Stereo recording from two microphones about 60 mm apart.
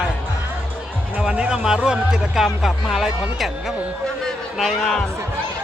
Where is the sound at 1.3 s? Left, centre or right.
Centre.